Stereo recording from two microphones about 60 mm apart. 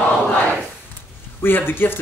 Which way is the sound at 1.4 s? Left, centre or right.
Left.